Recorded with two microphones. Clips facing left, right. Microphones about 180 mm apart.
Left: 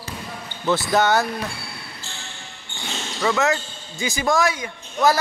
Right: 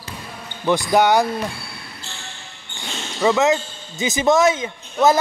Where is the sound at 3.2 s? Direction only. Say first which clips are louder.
Right 4 dB; 20° right (ahead or behind).